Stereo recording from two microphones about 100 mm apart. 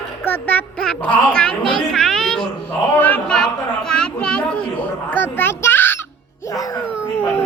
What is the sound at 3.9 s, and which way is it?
Children playing, 10° left (ahead or behind).